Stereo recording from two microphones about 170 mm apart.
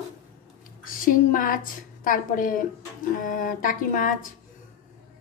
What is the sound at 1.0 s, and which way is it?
A woman's voice, 55° left (ahead or behind).